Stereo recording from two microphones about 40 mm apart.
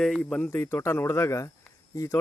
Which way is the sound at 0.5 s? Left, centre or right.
Left.